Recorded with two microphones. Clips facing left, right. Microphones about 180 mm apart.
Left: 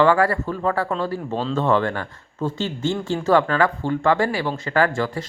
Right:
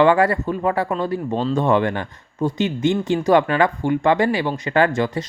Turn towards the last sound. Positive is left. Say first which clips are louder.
# right 2 dB
turn(degrees=-20)  # may be behind; listen again after turning